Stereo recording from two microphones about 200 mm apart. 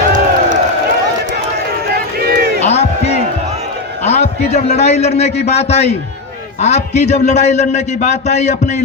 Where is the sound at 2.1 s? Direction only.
50° right (ahead or behind).